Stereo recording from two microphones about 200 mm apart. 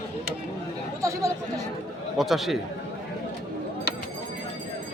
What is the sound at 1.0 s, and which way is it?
Chatter, 15° right (ahead or behind).